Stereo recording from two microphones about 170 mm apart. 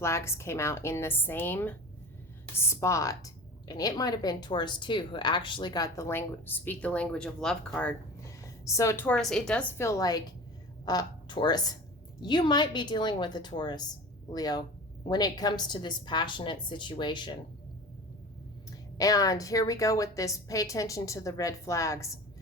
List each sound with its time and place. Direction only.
0.0 s a woman's voice: 15° left (ahead or behind)
18.9 s a woman's voice: 20° left (ahead or behind)